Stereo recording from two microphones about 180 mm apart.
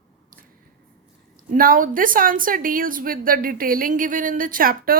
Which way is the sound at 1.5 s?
50° right (ahead or behind).